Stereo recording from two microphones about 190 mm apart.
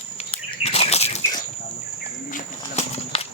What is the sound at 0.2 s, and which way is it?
Bird, 30° left (ahead or behind).